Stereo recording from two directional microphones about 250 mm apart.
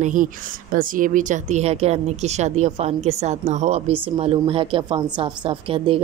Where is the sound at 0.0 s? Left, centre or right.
Right.